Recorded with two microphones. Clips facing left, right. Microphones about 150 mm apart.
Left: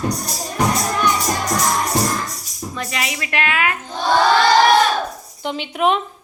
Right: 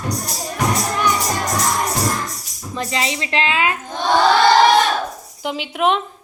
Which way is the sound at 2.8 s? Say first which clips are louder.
Right 4 dB; 30° right (ahead or behind).